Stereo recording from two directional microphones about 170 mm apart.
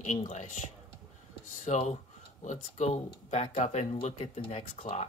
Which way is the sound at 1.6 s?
40° left (ahead or behind).